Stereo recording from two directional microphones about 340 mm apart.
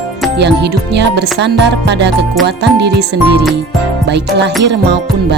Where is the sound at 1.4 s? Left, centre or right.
Right.